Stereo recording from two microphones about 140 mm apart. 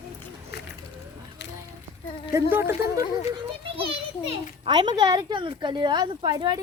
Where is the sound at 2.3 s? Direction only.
15° right (ahead or behind).